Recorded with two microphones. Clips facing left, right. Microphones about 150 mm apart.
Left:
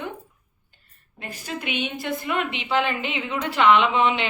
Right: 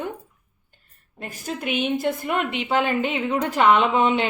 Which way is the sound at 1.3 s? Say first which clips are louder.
Right 3 dB; 45° right (ahead or behind).